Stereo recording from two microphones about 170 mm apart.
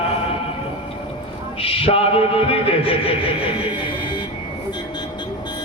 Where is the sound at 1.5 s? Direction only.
35° left (ahead or behind).